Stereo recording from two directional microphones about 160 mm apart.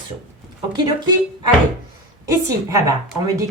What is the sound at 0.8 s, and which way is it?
Speech, 25° right (ahead or behind).